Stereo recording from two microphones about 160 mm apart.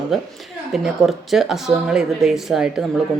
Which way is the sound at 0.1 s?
Centre (ahead or behind).